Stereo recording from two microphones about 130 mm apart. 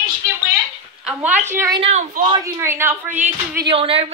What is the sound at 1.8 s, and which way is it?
Speech, 55° right (ahead or behind).